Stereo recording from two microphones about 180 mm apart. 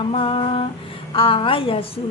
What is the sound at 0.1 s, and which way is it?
A woman's voice, 30° left (ahead or behind).